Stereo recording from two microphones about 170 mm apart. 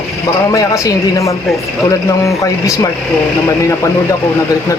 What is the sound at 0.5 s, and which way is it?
A man's voice, 20° left (ahead or behind).